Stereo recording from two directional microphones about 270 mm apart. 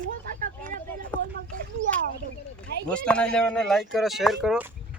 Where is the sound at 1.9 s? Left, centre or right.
Right.